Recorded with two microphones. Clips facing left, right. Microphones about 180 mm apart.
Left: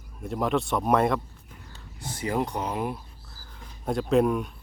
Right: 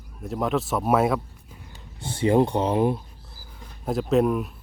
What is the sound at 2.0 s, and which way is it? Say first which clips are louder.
Speech: right 8 dB; 30° right (ahead or behind).